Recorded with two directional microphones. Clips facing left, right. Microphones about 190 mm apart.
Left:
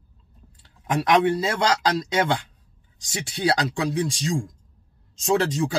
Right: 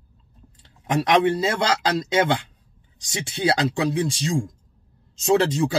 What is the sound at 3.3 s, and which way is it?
Speech, 25° right (ahead or behind).